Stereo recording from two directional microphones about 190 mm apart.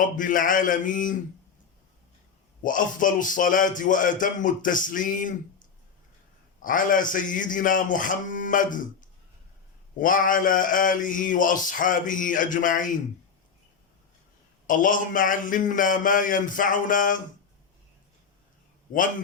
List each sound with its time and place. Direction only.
0.0 s speech: 45° left (ahead or behind)
2.6 s speech: 45° left (ahead or behind)
14.7 s speech: 45° left (ahead or behind)
18.9 s speech: 45° left (ahead or behind)